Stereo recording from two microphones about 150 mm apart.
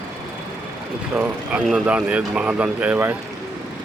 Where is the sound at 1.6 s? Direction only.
5° right (ahead or behind).